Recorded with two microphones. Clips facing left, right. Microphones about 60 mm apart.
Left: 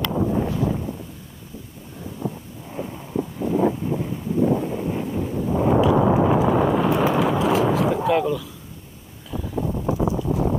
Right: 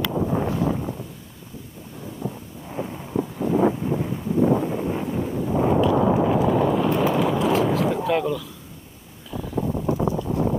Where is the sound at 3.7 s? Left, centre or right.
Centre.